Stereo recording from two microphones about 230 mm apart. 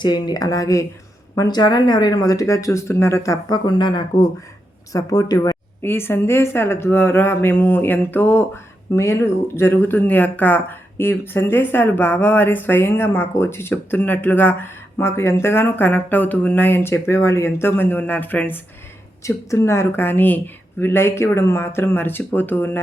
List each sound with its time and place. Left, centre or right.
0.0 s speech: centre